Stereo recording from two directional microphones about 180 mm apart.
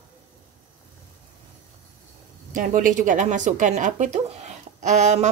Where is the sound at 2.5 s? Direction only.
50° right (ahead or behind).